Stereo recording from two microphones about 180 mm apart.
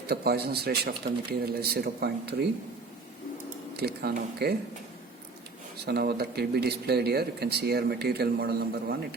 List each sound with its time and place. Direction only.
0.1 s speech: 60° right (ahead or behind)
3.8 s speech: 60° right (ahead or behind)
5.8 s speech: 60° right (ahead or behind)